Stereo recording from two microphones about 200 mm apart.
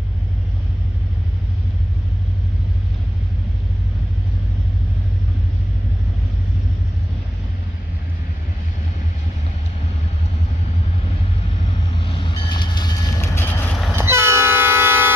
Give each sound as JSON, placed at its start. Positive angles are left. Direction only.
{"t": 12.0, "sound": "vehicle", "side_deg": 25}
{"t": 13.9, "sound": "train", "side_deg": -15}